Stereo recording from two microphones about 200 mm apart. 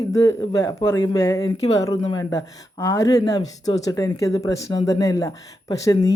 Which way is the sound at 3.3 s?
25° left (ahead or behind).